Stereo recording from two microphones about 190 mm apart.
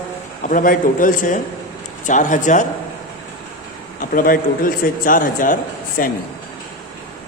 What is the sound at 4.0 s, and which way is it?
A man's voice, 45° left (ahead or behind).